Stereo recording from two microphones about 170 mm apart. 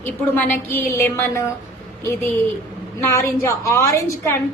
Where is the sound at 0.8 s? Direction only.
15° left (ahead or behind).